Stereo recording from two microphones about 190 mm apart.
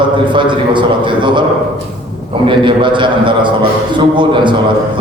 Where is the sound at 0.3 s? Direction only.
25° right (ahead or behind).